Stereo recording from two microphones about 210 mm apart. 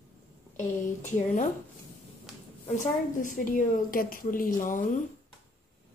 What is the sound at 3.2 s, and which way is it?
Speech, 40° left (ahead or behind).